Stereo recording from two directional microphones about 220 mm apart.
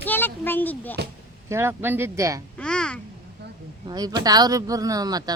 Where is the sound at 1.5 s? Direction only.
10° right (ahead or behind).